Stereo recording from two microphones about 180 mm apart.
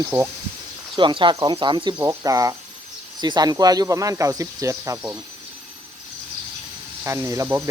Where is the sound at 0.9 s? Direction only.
25° right (ahead or behind).